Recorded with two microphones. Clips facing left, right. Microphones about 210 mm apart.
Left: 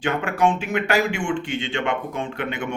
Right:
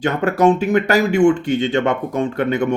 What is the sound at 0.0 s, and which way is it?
Speech, 40° right (ahead or behind).